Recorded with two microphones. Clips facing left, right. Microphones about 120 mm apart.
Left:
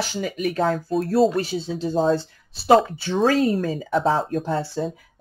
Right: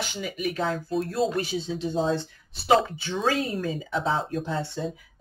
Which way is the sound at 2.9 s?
45° left (ahead or behind).